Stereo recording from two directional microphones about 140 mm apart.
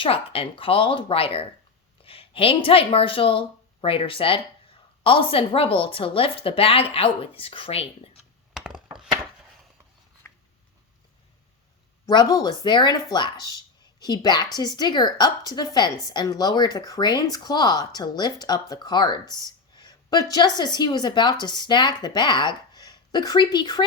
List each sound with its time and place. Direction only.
0.0 s speech: 40° left (ahead or behind)
8.5 s a sound: 5° right (ahead or behind)
12.0 s a woman's voice: 30° left (ahead or behind)